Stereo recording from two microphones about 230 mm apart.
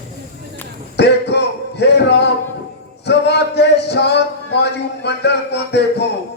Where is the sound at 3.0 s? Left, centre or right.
Left.